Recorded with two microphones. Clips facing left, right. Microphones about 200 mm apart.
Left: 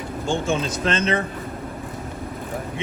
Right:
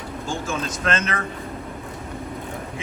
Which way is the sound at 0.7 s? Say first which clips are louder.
Left 3 dB; 35° left (ahead or behind).